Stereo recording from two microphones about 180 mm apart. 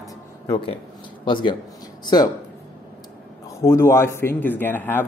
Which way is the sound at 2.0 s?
20° left (ahead or behind).